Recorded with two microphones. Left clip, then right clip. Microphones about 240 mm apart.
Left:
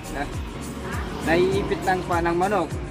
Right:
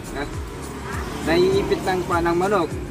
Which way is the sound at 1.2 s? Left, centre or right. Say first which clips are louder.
Right 2 dB; centre.